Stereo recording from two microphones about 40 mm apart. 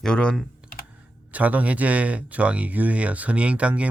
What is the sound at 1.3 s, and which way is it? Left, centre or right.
Speech, right.